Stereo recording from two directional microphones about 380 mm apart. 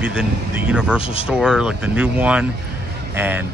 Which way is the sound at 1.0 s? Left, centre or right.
Centre.